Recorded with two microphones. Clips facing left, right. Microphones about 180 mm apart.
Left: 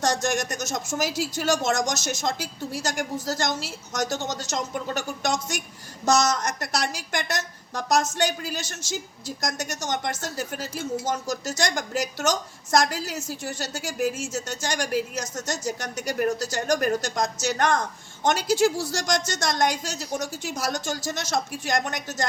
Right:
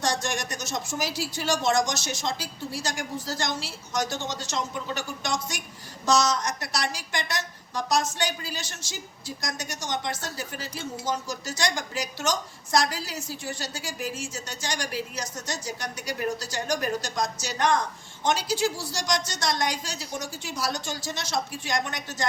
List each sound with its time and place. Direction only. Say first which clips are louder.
0.0 s a woman's voice: left 4 dB; 45° left (ahead or behind)